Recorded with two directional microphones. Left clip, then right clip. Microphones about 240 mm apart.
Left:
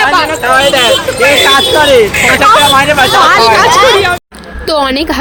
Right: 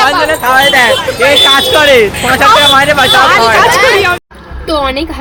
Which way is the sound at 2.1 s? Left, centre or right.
Centre.